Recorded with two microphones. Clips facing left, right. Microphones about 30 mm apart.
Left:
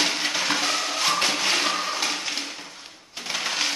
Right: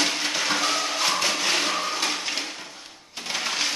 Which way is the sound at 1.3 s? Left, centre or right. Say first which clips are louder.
Left 1 dB; centre.